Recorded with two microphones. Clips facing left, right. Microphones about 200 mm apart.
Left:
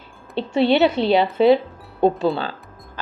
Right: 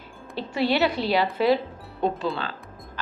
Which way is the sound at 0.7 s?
25° left (ahead or behind).